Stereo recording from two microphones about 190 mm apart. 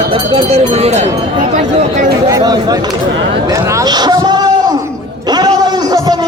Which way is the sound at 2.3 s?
20° right (ahead or behind).